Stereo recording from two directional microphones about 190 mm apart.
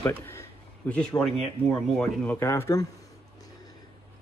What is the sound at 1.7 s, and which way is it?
Speech, 5° left (ahead or behind).